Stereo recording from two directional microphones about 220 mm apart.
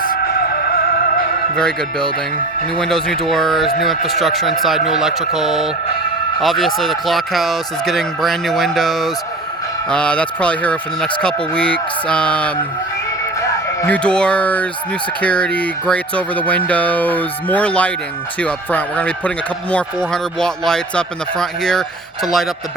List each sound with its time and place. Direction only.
0.0 s music: 40° left (ahead or behind)
1.5 s speech: 5° left (ahead or behind)
13.8 s speech: 5° left (ahead or behind)
15.2 s music: 5° left (ahead or behind)
20.4 s speech: 5° left (ahead or behind)